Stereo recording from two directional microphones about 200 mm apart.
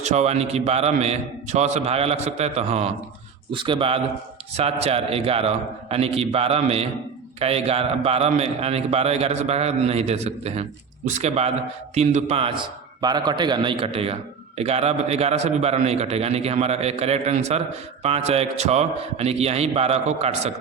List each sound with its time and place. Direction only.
0.0 s a man's voice: 35° right (ahead or behind)